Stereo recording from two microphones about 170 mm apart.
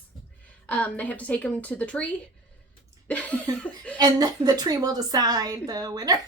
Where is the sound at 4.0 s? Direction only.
25° right (ahead or behind).